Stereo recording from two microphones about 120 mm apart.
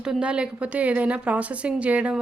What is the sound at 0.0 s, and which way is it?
A woman's voice, 5° right (ahead or behind).